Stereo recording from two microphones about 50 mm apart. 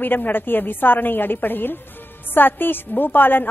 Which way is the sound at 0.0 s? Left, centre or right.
Left.